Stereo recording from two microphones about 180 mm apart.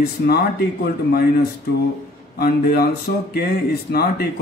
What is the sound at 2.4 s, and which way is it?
Speech, 60° left (ahead or behind).